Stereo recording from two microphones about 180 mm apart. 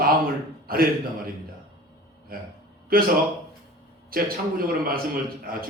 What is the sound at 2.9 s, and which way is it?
A man's voice, 55° right (ahead or behind).